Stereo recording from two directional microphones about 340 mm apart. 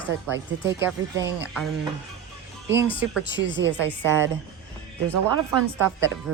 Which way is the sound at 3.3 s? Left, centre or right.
Right.